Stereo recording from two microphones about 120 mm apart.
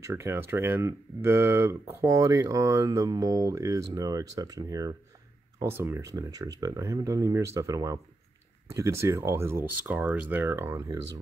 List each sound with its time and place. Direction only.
0.0 s speech: 20° right (ahead or behind)
5.6 s speech: 20° right (ahead or behind)